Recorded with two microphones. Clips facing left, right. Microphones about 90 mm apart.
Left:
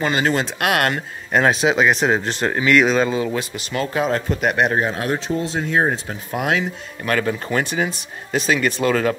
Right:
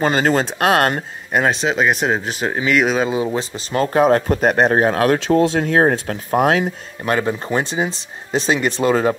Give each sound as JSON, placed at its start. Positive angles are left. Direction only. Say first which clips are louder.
{"t": 0.0, "sound": "speech", "louder": "right 3 dB", "side_deg": -35}
{"t": 1.3, "sound": "speech", "louder": "left 1 dB", "side_deg": 0}
{"t": 3.1, "sound": "speech", "louder": "right 2 dB", "side_deg": -20}
{"t": 4.4, "sound": "speech", "louder": "right 4 dB", "side_deg": -35}
{"t": 4.7, "sound": "speech", "louder": "right 6 dB", "side_deg": -60}
{"t": 6.4, "sound": "speech", "louder": "right 4 dB", "side_deg": -40}
{"t": 7.1, "sound": "speech", "louder": "right 2 dB", "side_deg": -25}